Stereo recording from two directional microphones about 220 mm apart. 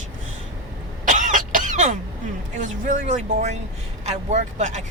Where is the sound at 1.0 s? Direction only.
35° right (ahead or behind).